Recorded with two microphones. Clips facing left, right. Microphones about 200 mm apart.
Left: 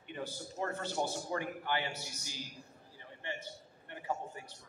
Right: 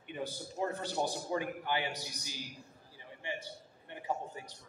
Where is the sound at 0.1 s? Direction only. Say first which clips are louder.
Right 2 dB; 15° right (ahead or behind).